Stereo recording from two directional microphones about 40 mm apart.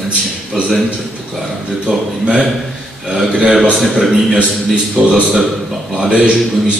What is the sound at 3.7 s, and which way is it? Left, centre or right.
Speech, centre.